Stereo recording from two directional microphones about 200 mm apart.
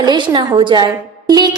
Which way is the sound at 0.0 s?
20° right (ahead or behind).